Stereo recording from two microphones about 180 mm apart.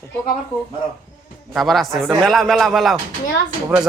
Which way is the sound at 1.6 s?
Centre (ahead or behind).